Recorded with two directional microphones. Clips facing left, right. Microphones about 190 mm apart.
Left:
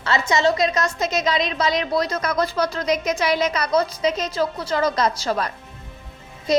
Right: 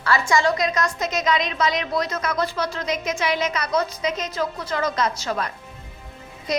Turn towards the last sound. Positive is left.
turn(degrees=25)  # may be behind; listen again after turning